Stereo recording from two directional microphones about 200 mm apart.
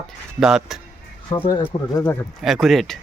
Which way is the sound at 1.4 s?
20° left (ahead or behind).